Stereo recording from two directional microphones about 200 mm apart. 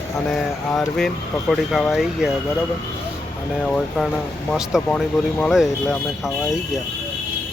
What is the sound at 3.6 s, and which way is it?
Speech, 5° left (ahead or behind).